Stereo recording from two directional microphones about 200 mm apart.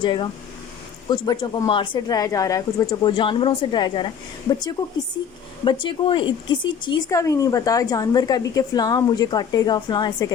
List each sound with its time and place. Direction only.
0.0 s speech: 25° left (ahead or behind)